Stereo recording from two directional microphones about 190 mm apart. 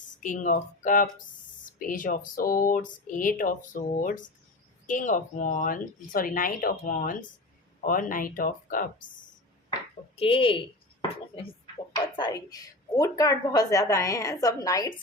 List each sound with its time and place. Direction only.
0.2 s speech: 45° left (ahead or behind)
10.2 s speech: 30° left (ahead or behind)
12.1 s a woman's voice: 20° left (ahead or behind)